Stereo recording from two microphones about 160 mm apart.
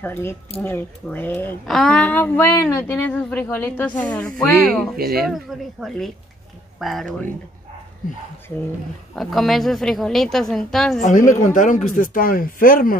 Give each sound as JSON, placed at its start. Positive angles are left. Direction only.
{"t": 0.0, "sound": "a woman's voice", "side_deg": 15}
{"t": 4.9, "sound": "speech", "side_deg": -70}
{"t": 5.2, "sound": "a woman's voice", "side_deg": 0}
{"t": 9.1, "sound": "a woman's voice", "side_deg": 0}
{"t": 11.0, "sound": "speech", "side_deg": 55}